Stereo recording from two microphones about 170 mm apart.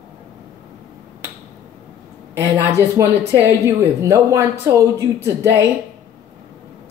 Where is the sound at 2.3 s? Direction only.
15° right (ahead or behind).